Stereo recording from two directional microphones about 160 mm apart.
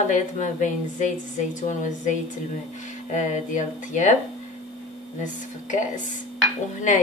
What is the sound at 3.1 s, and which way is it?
A woman's voice, 50° left (ahead or behind).